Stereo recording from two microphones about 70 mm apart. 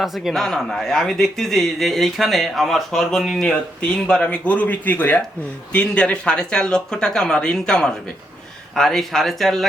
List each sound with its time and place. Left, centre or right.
0.0 s speech: centre
3.5 s speech: centre